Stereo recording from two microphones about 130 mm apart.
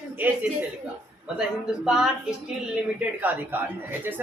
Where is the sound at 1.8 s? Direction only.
5° right (ahead or behind).